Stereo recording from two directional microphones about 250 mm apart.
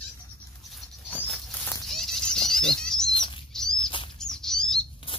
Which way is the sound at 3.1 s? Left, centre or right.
Centre.